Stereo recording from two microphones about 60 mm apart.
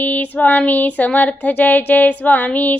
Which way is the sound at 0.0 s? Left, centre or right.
Left.